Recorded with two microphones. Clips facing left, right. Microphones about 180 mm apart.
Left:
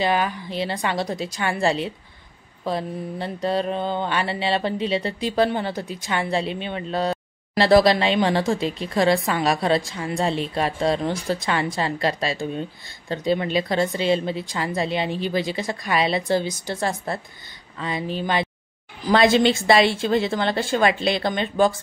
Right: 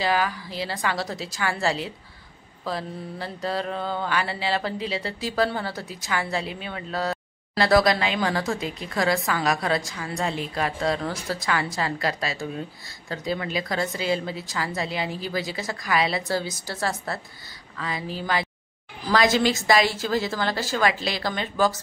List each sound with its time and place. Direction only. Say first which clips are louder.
0.0 s mantra: left 2 dB; 20° left (ahead or behind)